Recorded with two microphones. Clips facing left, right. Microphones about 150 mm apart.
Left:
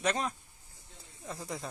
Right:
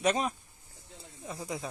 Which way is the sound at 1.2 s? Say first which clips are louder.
Right 2 dB; 5° right (ahead or behind).